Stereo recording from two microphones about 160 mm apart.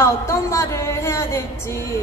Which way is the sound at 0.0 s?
15° left (ahead or behind).